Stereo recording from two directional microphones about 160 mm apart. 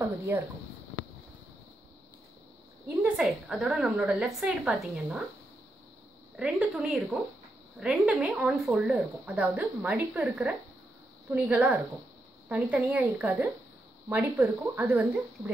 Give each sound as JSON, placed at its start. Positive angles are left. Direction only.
{"t": 0.3, "sound": "speech", "side_deg": -15}
{"t": 3.0, "sound": "a woman's voice", "side_deg": -5}
{"t": 6.3, "sound": "a woman's voice", "side_deg": -5}